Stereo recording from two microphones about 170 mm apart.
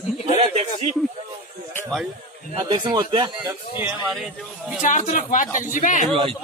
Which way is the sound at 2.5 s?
25° right (ahead or behind).